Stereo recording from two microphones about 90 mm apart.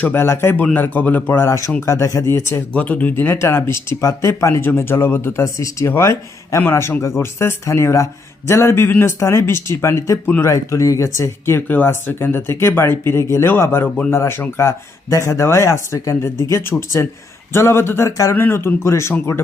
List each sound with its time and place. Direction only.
0.0 s speech: 25° left (ahead or behind)
1.5 s speech: 35° left (ahead or behind)
2.7 s speech: 15° left (ahead or behind)
13.8 s speech: 15° left (ahead or behind)
14.1 s speech: 30° left (ahead or behind)